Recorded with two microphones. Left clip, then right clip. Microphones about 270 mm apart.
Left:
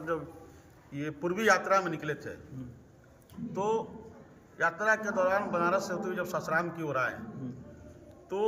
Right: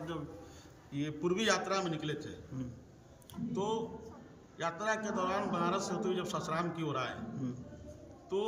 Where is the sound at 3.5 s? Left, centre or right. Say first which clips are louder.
Left 5 dB; centre.